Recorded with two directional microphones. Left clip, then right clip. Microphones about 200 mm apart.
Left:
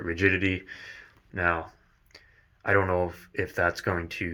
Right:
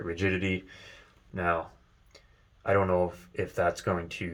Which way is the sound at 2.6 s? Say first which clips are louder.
Left 1 dB; 15° left (ahead or behind).